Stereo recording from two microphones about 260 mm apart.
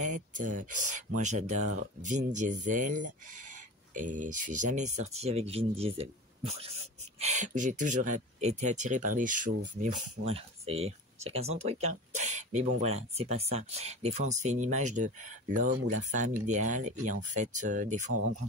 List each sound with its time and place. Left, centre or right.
0.0 s speech: right